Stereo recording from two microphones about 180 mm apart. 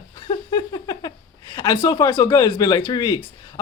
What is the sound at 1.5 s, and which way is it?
Speech, 20° left (ahead or behind).